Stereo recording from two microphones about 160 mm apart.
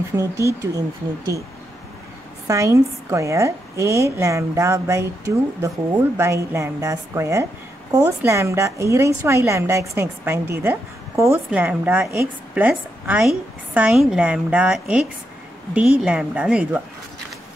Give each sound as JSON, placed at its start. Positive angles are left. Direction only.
{"t": 0.1, "sound": "a woman's voice", "side_deg": -20}
{"t": 2.4, "sound": "a woman's voice", "side_deg": -20}